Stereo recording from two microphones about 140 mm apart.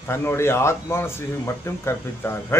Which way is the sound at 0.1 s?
20° left (ahead or behind).